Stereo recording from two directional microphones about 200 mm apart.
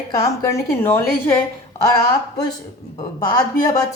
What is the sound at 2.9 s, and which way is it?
Speech, 20° left (ahead or behind).